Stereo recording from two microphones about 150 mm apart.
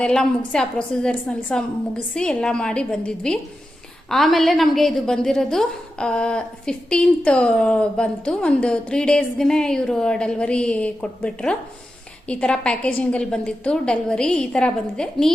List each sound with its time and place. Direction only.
0.0 s a woman's voice: 5° left (ahead or behind)